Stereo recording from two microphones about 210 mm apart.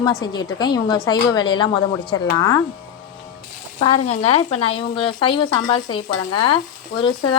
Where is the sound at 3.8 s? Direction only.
25° left (ahead or behind).